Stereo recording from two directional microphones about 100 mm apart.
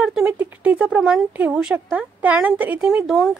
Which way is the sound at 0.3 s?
15° right (ahead or behind).